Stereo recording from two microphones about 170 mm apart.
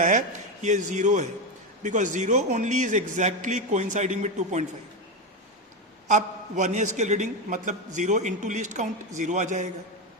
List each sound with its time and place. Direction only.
0.6 s a man's voice: 45° right (ahead or behind)
6.1 s a man's voice: 45° right (ahead or behind)